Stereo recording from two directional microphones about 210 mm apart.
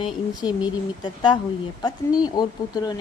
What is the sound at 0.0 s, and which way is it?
A woman's voice, 20° left (ahead or behind).